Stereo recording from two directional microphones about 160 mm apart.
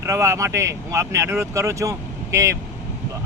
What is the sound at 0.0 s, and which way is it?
Speech, 20° right (ahead or behind).